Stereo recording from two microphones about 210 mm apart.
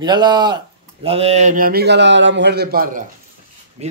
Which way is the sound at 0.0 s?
20° right (ahead or behind).